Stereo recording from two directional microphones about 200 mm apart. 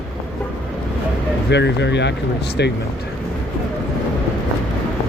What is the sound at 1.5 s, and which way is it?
Speech, 60° left (ahead or behind).